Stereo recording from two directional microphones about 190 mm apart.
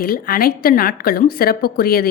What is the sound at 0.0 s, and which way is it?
A woman's voice, 50° left (ahead or behind).